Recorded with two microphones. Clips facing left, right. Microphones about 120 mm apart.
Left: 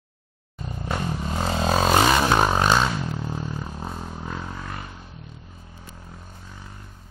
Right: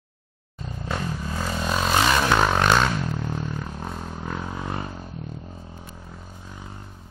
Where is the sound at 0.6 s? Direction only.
15° left (ahead or behind); by 1.7 s 30° left (ahead or behind).